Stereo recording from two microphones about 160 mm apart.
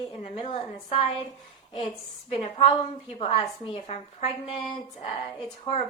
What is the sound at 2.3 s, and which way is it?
A woman's voice, 35° left (ahead or behind).